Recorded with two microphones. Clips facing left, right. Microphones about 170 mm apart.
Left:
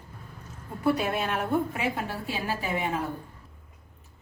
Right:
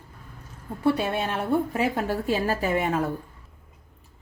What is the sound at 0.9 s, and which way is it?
A woman's voice, 30° right (ahead or behind).